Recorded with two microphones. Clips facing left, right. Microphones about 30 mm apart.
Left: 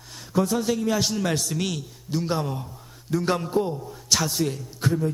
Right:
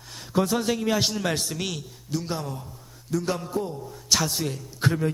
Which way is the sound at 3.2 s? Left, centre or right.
Left.